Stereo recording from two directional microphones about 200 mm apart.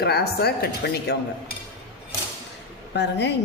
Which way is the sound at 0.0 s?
55° left (ahead or behind).